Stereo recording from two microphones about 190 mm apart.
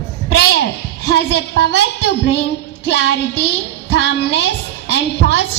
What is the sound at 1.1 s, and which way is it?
A woman's voice, 65° left (ahead or behind).